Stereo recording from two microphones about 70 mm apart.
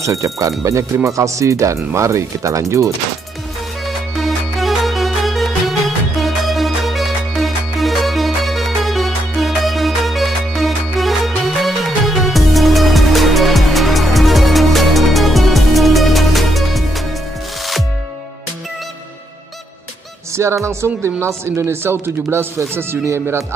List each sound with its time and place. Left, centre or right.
0.0 s speech: right
3.8 s music: centre
20.3 s speech: right